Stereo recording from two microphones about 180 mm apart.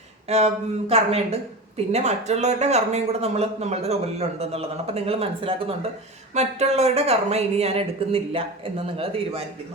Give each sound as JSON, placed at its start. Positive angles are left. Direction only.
{"t": 0.3, "sound": "speech", "side_deg": -35}